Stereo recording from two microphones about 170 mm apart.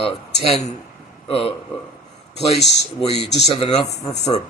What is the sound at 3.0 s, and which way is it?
Speech, 35° left (ahead or behind).